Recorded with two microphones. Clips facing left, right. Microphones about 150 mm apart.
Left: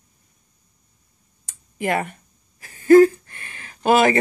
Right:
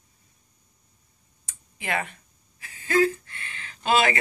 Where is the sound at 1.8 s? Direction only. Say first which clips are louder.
Left 7 dB; 45° left (ahead or behind).